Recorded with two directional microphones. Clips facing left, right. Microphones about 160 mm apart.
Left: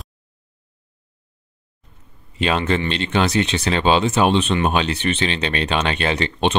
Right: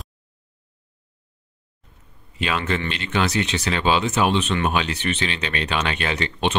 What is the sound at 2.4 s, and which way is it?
Speech, 30° left (ahead or behind).